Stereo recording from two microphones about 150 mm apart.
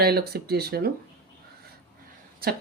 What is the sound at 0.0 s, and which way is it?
Speech, 90° right.